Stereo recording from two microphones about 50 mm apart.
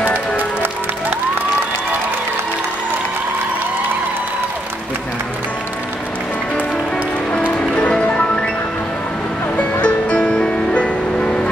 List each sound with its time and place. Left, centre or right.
7.4 s music: left
9.6 s music: left